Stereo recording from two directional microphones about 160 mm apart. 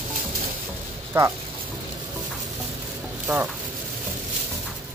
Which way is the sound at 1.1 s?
15° right (ahead or behind).